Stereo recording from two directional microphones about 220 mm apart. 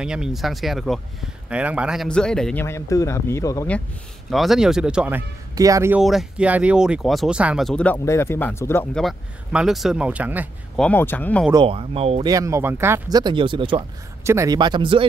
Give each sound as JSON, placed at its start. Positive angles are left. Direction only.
{"t": 0.0, "sound": "speech", "side_deg": -5}
{"t": 4.3, "sound": "speech", "side_deg": 0}
{"t": 5.5, "sound": "speech", "side_deg": -15}
{"t": 10.8, "sound": "speech", "side_deg": 10}
{"t": 11.5, "sound": "speech", "side_deg": -25}